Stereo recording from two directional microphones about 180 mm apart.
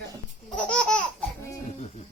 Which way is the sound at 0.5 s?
5° left (ahead or behind).